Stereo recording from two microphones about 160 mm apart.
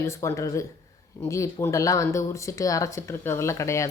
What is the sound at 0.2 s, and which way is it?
A woman's voice, 20° left (ahead or behind).